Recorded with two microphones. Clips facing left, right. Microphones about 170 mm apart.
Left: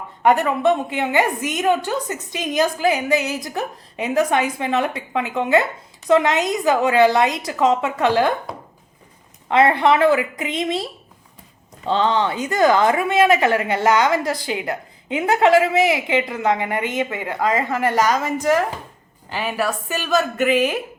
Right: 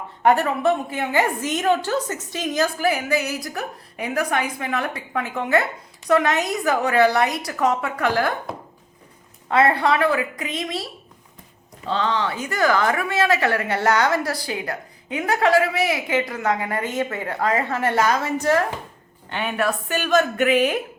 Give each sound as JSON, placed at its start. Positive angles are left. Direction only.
{"t": 0.3, "sound": "a woman's voice", "side_deg": 20}
{"t": 9.5, "sound": "a woman's voice", "side_deg": 20}
{"t": 11.9, "sound": "a woman's voice", "side_deg": 25}